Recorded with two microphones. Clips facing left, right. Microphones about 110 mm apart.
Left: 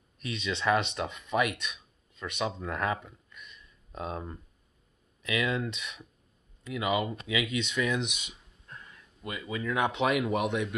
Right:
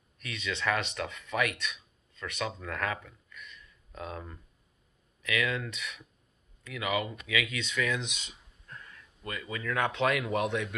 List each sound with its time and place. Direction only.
0.2 s speech: 20° left (ahead or behind)